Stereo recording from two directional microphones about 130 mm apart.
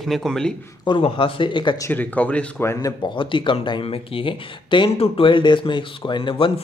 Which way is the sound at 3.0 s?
40° left (ahead or behind).